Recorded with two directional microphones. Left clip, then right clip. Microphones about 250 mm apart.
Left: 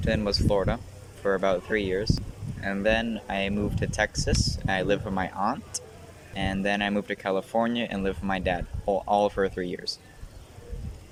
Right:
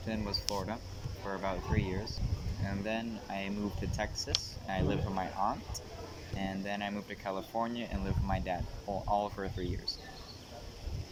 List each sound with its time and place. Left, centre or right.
0.0 s speech: left